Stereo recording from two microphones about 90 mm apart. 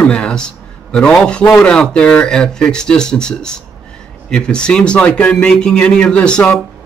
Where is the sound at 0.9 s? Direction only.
10° left (ahead or behind).